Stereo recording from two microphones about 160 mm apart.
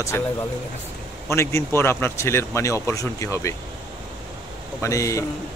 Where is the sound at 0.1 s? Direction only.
15° left (ahead or behind).